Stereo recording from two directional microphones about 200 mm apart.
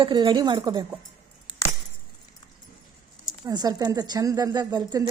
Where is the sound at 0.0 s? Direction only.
25° right (ahead or behind).